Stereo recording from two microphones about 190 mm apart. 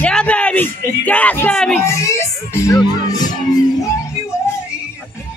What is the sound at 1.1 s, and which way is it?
Speech, 10° left (ahead or behind).